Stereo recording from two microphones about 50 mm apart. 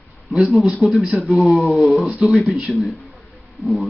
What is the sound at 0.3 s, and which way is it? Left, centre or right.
A man's voice, centre.